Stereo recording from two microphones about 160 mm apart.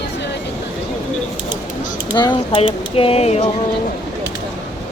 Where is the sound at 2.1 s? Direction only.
30° left (ahead or behind).